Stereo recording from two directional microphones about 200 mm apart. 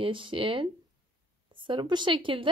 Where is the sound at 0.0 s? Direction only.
25° right (ahead or behind).